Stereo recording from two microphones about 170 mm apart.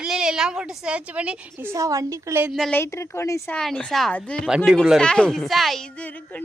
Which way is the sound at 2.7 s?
15° left (ahead or behind).